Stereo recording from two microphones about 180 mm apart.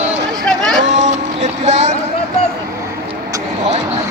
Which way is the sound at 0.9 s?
40° right (ahead or behind).